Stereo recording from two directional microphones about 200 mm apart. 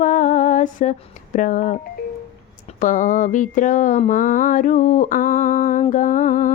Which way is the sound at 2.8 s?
40° left (ahead or behind).